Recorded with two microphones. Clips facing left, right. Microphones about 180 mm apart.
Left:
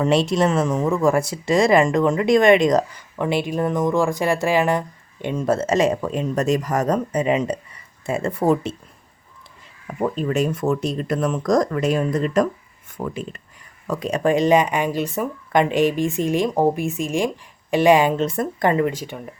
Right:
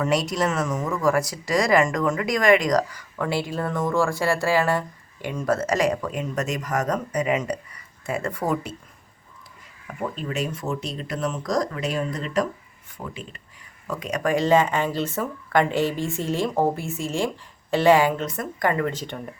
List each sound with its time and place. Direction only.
0.0 s speech: 30° left (ahead or behind)
9.8 s speech: 40° left (ahead or behind)
12.9 s a sound: 45° left (ahead or behind)
13.8 s speech: 35° left (ahead or behind)
18.9 s speech: 10° left (ahead or behind)